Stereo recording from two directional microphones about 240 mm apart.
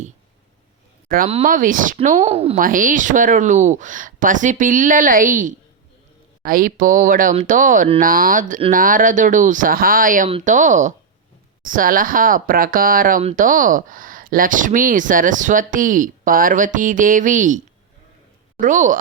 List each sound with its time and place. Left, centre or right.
1.0 s speech: right
18.6 s speech: right